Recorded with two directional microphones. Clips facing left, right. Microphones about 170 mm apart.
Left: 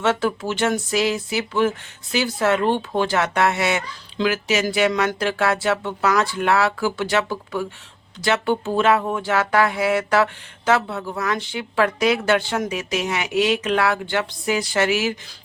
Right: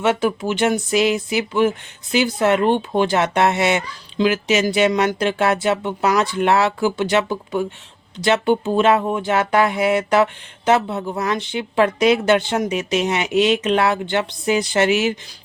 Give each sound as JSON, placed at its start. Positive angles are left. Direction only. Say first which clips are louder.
{"t": 0.0, "sound": "speech", "louder": "right 2 dB", "side_deg": -15}